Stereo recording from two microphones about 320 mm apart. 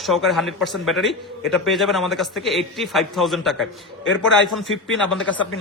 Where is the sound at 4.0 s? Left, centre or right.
Left.